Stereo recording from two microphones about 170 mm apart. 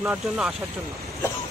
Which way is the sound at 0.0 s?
Centre (ahead or behind).